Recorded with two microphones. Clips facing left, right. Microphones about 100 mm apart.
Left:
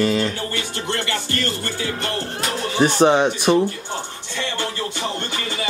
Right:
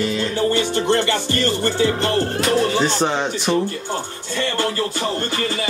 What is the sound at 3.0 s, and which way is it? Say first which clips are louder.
Speech: left 5 dB; 15° left (ahead or behind).